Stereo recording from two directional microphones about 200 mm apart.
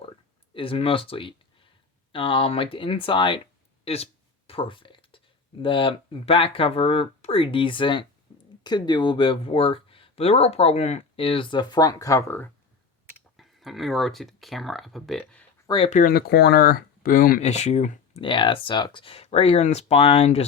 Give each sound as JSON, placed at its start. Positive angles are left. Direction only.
{"t": 0.5, "sound": "speech", "side_deg": 25}
{"t": 3.8, "sound": "a sound", "side_deg": 30}
{"t": 5.6, "sound": "speech", "side_deg": 25}
{"t": 13.3, "sound": "speech", "side_deg": 0}
{"t": 15.6, "sound": "speech", "side_deg": 25}
{"t": 15.9, "sound": "speech", "side_deg": 40}
{"t": 18.2, "sound": "speech", "side_deg": 25}